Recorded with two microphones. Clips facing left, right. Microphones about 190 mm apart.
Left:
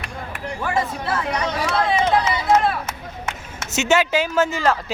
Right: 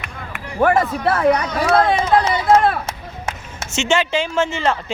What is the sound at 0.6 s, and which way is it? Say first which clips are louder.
Speech: right 9 dB; 60° right (ahead or behind).